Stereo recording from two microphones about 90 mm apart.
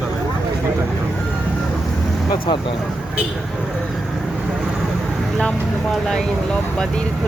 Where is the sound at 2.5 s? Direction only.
55° left (ahead or behind).